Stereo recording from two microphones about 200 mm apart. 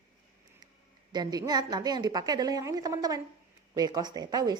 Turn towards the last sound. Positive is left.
turn(degrees=-20)  # may be behind; listen again after turning